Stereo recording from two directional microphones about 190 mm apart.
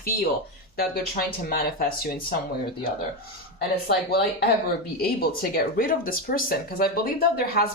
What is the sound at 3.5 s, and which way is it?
Speech, 55° left (ahead or behind).